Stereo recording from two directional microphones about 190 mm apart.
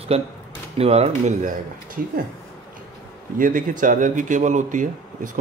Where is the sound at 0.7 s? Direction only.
30° right (ahead or behind); by 2.1 s 50° right (ahead or behind).